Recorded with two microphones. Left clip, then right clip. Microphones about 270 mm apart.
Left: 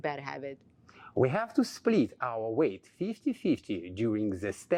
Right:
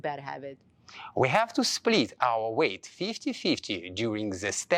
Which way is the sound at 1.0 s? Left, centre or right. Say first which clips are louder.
Right 4 dB; right.